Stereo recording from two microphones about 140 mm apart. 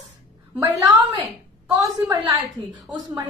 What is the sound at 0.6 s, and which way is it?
A woman's voice, 25° right (ahead or behind).